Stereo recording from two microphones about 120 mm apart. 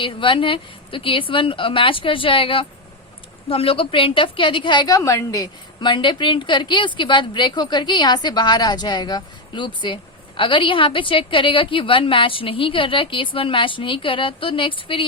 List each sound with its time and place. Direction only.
0.0 s a woman's voice: 45° left (ahead or behind)
4.9 s a woman's voice: 25° left (ahead or behind); by 15.0 s 45° left (ahead or behind)